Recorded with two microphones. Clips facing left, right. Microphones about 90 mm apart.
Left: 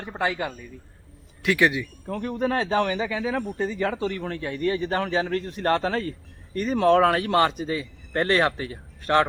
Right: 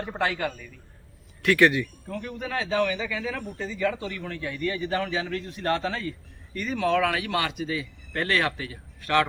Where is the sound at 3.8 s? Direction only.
30° left (ahead or behind).